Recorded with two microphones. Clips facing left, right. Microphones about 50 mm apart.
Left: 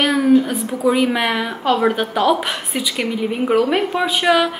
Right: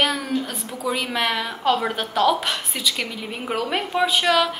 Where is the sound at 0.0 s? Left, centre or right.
Centre.